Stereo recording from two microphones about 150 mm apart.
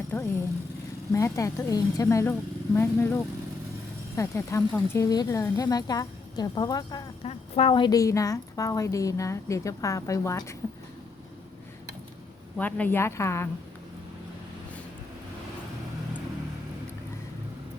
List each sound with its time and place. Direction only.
0.1 s speech: 10° left (ahead or behind)
1.1 s a woman's voice: 20° left (ahead or behind)
7.3 s a woman's voice: 40° left (ahead or behind); by 10.5 s 20° left (ahead or behind)
12.5 s a woman's voice: 10° left (ahead or behind)